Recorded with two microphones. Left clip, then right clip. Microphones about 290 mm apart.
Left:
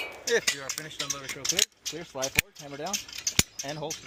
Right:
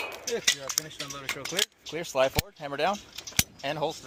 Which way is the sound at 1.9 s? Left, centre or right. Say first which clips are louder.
Right 4 dB; right.